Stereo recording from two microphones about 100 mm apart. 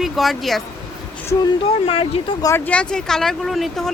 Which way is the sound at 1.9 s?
70° left (ahead or behind).